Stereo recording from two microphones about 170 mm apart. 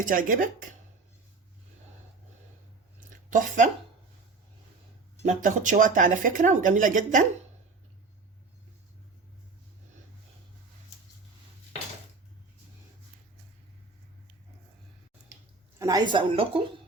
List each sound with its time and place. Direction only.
0.0 s speech: 55° right (ahead or behind)
3.2 s a woman's voice: 50° right (ahead or behind)
5.2 s speech: 45° right (ahead or behind)
15.8 s a woman's voice: 20° right (ahead or behind)